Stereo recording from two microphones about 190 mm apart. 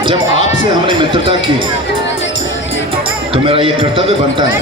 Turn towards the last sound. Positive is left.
turn(degrees=-25)  # may be behind; listen again after turning